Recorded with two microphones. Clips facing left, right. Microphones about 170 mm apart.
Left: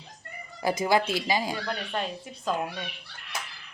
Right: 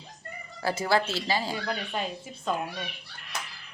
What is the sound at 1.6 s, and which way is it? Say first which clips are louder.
Speech: even; 5° right (ahead or behind).